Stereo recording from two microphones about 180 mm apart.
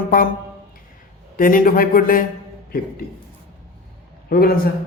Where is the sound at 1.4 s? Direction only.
50° left (ahead or behind).